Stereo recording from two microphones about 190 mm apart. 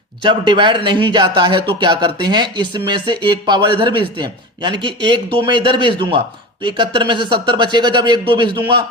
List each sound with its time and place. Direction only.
0.2 s speech: 25° right (ahead or behind)